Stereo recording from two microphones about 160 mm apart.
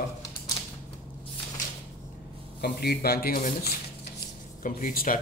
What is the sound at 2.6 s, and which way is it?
A man's voice, 85° left.